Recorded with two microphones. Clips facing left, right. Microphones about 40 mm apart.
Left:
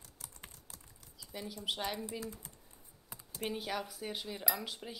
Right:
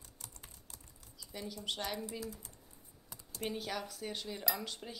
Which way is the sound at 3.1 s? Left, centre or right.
Centre.